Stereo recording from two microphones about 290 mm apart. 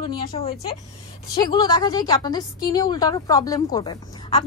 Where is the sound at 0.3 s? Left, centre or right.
Left.